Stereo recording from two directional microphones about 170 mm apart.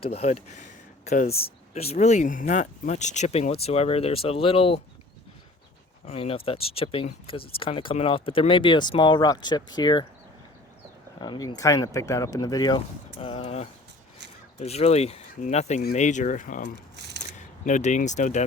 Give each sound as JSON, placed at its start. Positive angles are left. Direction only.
{"t": 0.0, "sound": "speech", "side_deg": 35}
{"t": 6.1, "sound": "speech", "side_deg": 35}
{"t": 11.2, "sound": "speech", "side_deg": 25}
{"t": 13.1, "sound": "speech", "side_deg": 35}
{"t": 17.0, "sound": "scissors", "side_deg": -85}
{"t": 17.3, "sound": "speech", "side_deg": 45}